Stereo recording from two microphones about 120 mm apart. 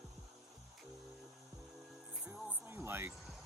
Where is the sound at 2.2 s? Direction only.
10° right (ahead or behind).